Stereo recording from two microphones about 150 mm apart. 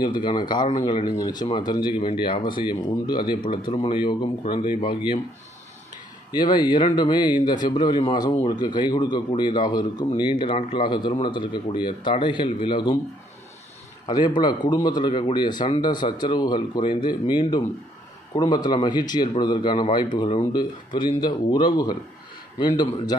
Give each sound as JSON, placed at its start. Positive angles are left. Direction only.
{"t": 0.0, "sound": "speech", "side_deg": 30}
{"t": 6.3, "sound": "speech", "side_deg": 30}
{"t": 14.0, "sound": "a man's voice", "side_deg": 30}